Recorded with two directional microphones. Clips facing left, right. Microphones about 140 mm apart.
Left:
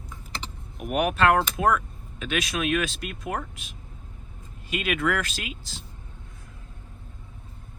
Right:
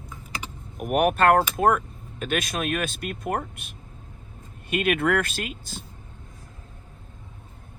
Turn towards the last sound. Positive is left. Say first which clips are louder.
# right 4 dB
turn(degrees=-50)  # may be behind; listen again after turning